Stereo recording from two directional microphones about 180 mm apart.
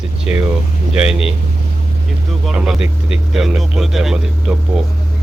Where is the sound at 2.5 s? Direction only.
5° right (ahead or behind).